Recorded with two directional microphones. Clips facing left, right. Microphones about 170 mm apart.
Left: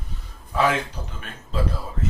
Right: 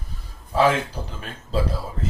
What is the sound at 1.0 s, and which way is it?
Speech, 30° right (ahead or behind).